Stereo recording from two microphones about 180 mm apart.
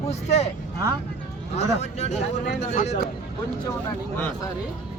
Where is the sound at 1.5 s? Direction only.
40° left (ahead or behind).